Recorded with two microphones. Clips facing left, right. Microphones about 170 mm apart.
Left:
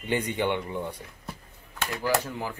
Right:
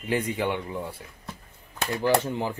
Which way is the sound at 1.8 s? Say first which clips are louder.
Right 4 dB; 25° right (ahead or behind).